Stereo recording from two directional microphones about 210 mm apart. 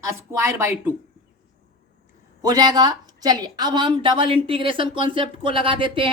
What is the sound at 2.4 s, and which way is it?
A woman's voice, 20° right (ahead or behind).